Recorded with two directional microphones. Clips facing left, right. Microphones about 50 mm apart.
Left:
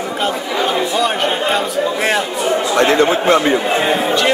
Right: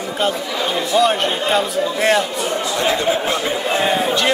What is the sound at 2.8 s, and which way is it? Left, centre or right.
Speech, left.